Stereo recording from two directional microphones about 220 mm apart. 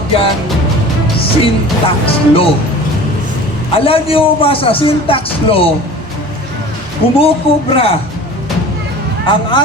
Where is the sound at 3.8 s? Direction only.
25° left (ahead or behind).